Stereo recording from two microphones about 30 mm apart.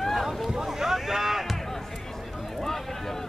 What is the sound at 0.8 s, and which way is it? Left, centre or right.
Boat, centre.